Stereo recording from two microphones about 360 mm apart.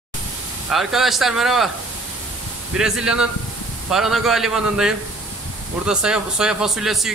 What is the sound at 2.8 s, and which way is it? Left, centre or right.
Speech, centre.